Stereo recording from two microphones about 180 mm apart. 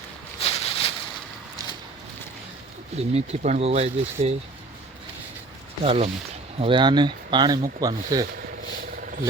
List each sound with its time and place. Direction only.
0.3 s a sound: 35° left (ahead or behind)
2.9 s speech: 35° right (ahead or behind)
5.8 s speech: 35° right (ahead or behind)